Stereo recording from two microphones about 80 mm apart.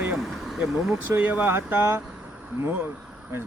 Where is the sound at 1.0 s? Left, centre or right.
Right.